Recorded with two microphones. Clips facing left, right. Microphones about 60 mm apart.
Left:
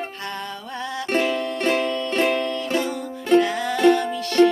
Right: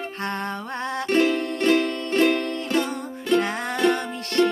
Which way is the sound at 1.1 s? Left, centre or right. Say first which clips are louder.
Right 1 dB; left.